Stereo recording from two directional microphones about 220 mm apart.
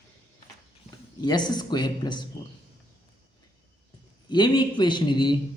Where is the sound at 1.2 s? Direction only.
20° left (ahead or behind).